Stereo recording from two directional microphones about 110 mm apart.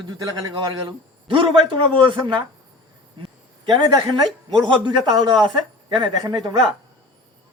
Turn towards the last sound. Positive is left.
turn(degrees=-40)  # may be behind; listen again after turning